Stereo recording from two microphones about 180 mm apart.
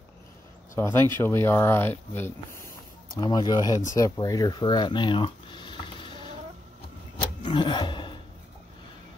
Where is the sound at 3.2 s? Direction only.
25° left (ahead or behind).